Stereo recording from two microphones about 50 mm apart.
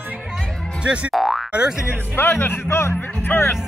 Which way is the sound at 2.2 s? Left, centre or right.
Left.